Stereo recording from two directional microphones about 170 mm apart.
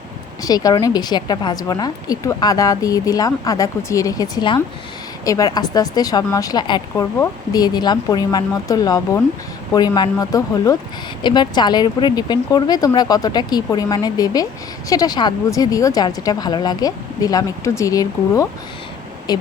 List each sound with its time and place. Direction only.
0.4 s a woman's voice: 20° left (ahead or behind)